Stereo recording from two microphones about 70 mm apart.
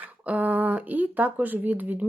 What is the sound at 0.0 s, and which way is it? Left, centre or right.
Speech, right.